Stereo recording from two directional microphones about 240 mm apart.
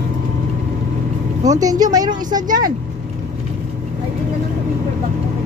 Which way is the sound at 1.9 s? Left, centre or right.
Centre.